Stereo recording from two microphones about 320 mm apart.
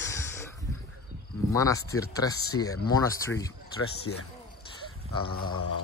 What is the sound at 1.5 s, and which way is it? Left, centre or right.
Speech, centre.